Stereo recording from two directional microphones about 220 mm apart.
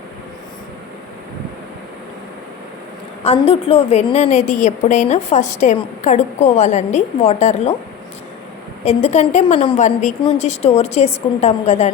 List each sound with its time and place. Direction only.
3.2 s a woman's voice: 25° left (ahead or behind)
8.8 s a woman's voice: 30° left (ahead or behind)